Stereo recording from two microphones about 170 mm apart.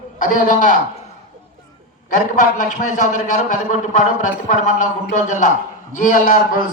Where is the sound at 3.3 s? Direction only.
45° left (ahead or behind).